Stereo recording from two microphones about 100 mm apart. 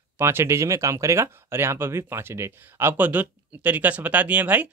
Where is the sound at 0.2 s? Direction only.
25° right (ahead or behind).